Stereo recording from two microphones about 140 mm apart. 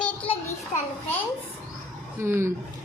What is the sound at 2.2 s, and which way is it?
Speech, 20° right (ahead or behind).